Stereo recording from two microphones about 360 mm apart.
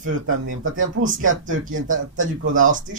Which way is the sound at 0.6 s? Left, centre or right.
Right.